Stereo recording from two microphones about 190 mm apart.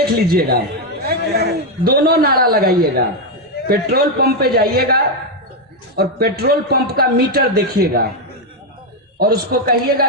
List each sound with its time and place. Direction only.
0.0 s a woman's voice: 55° right (ahead or behind)
9.1 s a woman's voice: 55° right (ahead or behind)